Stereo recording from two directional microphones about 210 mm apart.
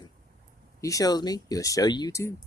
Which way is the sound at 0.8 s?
15° left (ahead or behind).